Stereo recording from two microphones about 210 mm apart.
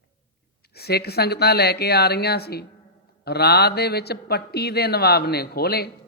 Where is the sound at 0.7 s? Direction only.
50° left (ahead or behind).